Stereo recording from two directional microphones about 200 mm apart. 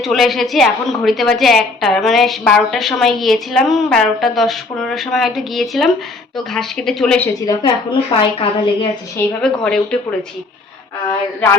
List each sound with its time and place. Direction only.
0.0 s a woman's voice: centre (ahead or behind)
7.4 s a woman's voice: 25° left (ahead or behind)
9.1 s a woman's voice: 5° left (ahead or behind)